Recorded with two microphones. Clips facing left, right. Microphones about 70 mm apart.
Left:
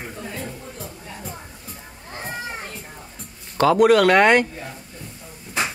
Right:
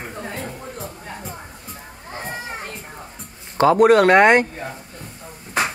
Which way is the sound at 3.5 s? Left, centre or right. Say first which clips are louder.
Right 2 dB; right.